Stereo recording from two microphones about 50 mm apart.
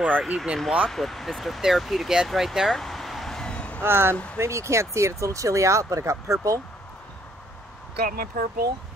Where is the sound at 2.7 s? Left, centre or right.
Centre.